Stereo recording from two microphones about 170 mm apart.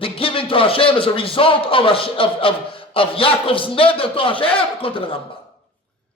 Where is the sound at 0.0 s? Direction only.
30° left (ahead or behind).